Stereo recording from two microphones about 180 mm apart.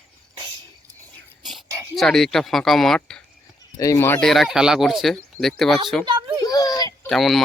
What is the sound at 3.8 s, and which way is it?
Speech, 15° left (ahead or behind).